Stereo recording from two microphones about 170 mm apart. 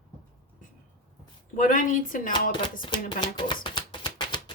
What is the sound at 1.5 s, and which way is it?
Speech, 50° left (ahead or behind).